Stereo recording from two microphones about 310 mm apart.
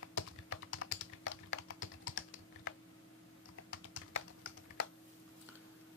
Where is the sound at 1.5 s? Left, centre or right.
Left.